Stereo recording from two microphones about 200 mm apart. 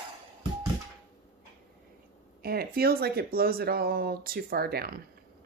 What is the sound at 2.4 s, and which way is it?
Speech, 50° right (ahead or behind).